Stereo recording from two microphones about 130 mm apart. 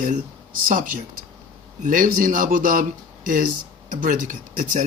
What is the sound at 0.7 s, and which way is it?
Speech, 90° right.